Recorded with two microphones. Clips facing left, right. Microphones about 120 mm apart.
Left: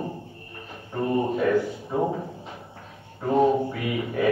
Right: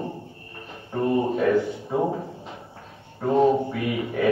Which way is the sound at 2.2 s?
25° right (ahead or behind).